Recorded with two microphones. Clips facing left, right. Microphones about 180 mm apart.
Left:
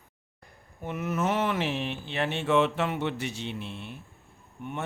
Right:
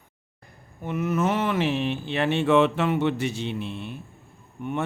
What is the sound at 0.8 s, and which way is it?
Speech, 90° right.